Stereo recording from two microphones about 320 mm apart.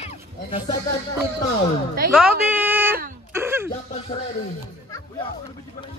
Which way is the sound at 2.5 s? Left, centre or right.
Centre.